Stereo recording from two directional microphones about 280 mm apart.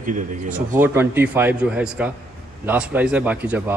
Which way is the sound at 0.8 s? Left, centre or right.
Centre.